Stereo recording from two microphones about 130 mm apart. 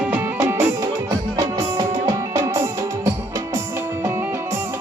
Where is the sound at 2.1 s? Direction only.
25° right (ahead or behind).